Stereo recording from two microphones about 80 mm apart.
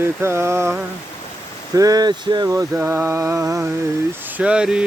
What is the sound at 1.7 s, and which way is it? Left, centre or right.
Speech, right.